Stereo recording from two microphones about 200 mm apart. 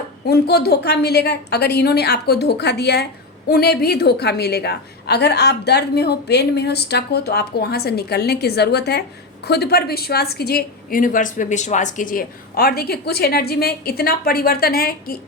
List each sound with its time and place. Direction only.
0.3 s a woman's voice: 55° left (ahead or behind)